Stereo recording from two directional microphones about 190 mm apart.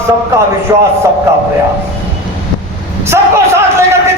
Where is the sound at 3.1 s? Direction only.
15° right (ahead or behind).